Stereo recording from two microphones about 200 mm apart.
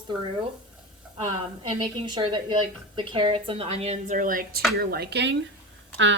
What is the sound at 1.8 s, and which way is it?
A woman's voice, 25° right (ahead or behind).